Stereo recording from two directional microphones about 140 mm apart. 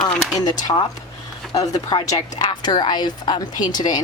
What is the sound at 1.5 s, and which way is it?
Speech, 45° left (ahead or behind).